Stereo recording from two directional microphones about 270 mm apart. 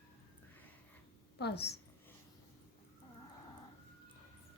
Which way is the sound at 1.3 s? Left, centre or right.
Left.